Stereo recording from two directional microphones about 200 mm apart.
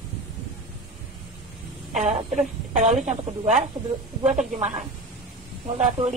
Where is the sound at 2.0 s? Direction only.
35° right (ahead or behind).